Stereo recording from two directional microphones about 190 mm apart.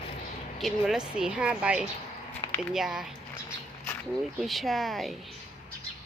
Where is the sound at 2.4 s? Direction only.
25° left (ahead or behind).